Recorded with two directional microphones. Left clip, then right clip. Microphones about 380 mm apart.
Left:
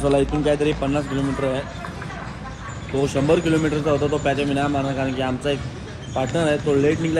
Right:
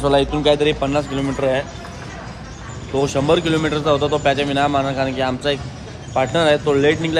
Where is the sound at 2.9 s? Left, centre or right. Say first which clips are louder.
Right 3 dB; centre.